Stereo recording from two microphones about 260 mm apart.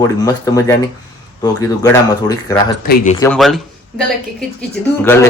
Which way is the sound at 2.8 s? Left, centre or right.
Left.